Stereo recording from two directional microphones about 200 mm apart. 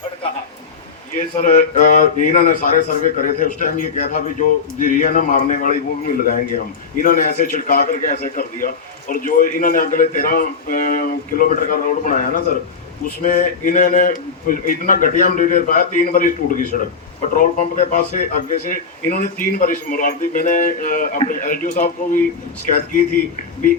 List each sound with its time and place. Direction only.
1.4 s a man's voice: 40° left (ahead or behind)